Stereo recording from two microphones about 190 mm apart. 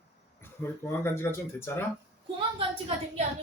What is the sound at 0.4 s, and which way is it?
Speech, 10° left (ahead or behind).